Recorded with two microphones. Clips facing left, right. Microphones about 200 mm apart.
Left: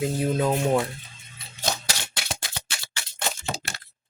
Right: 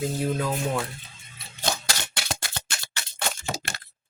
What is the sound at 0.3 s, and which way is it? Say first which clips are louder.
Speech: left 5 dB; 30° left (ahead or behind).